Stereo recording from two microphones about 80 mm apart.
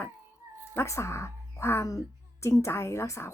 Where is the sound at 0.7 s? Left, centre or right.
Left.